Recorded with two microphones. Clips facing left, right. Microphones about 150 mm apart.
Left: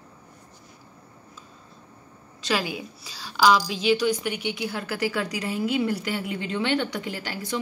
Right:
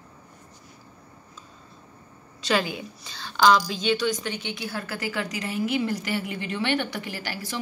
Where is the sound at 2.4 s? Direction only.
5° left (ahead or behind).